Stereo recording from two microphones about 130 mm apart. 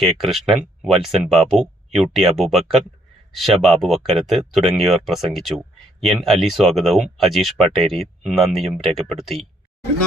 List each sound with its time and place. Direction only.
0.0 s speech: centre (ahead or behind)